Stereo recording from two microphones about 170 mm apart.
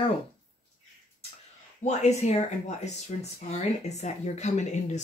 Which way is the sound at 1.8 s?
40° left (ahead or behind).